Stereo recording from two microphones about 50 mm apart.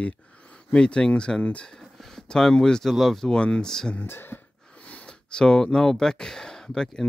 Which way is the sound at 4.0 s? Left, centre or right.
Left.